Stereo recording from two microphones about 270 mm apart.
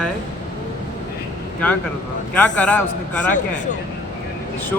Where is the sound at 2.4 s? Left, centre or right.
Centre.